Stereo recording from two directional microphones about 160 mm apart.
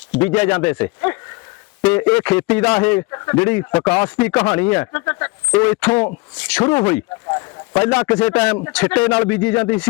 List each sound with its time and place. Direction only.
0.2 s speech: 10° left (ahead or behind)
3.1 s speech: 20° left (ahead or behind)
7.3 s a sound: 20° left (ahead or behind)
7.8 s speech: 10° left (ahead or behind)